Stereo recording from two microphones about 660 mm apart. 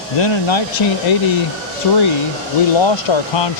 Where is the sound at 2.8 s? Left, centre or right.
Left.